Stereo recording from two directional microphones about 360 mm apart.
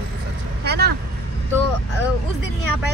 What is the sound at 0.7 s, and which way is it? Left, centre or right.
Speech, right.